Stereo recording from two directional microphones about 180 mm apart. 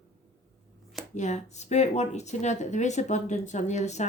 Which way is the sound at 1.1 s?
40° left (ahead or behind).